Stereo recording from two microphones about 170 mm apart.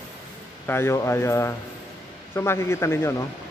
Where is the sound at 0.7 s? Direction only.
15° left (ahead or behind).